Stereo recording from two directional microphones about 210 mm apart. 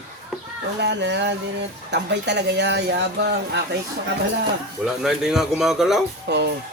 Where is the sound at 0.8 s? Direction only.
55° right (ahead or behind).